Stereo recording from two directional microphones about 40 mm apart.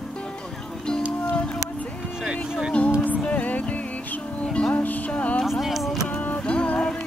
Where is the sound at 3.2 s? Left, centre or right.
Left.